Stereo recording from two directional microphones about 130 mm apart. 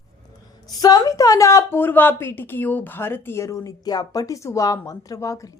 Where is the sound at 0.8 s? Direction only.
30° left (ahead or behind).